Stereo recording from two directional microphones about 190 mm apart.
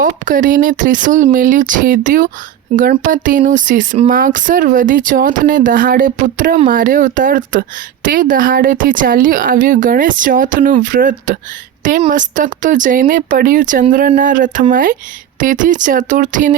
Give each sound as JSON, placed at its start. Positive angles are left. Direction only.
{"t": 0.0, "sound": "speech", "side_deg": -45}